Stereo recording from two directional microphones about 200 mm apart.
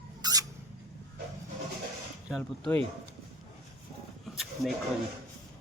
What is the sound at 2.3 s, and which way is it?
Speech, 10° left (ahead or behind).